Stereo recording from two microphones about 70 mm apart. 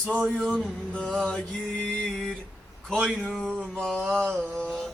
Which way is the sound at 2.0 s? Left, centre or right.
Centre.